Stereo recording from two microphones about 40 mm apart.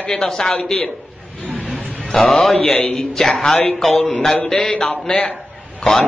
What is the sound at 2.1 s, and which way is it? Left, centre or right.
A man's voice, centre.